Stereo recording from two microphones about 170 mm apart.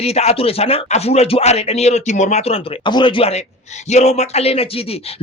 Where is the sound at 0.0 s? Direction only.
40° left (ahead or behind).